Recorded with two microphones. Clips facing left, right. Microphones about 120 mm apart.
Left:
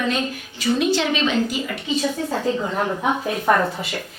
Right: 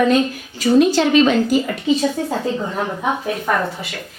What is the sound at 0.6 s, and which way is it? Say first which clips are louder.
A woman's voice: right 6 dB; 40° right (ahead or behind).